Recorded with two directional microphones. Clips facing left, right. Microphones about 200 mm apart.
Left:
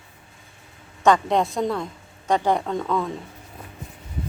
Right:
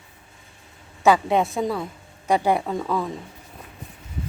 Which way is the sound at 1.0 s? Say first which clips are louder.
Even; 5° right (ahead or behind).